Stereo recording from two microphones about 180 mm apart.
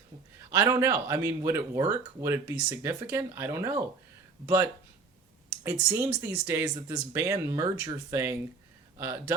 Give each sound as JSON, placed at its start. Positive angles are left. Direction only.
{"t": 0.5, "sound": "speech", "side_deg": -15}